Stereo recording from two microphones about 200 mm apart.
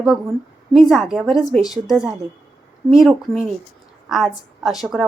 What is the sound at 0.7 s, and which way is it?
A woman's voice, centre (ahead or behind).